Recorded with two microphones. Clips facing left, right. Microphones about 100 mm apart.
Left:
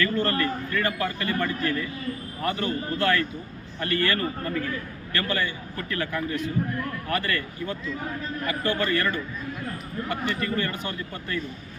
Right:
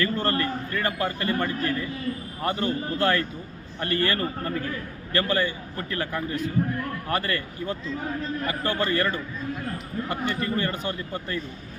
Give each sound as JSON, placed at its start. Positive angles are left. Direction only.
{"t": 0.0, "sound": "a man's voice", "side_deg": -30}